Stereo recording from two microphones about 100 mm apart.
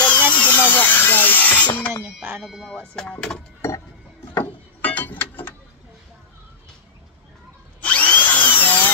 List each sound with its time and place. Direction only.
0.0 s drill: 15° left (ahead or behind)
2.4 s speech: centre (ahead or behind)
3.6 s a sound: 25° left (ahead or behind)
7.8 s drill: 15° left (ahead or behind)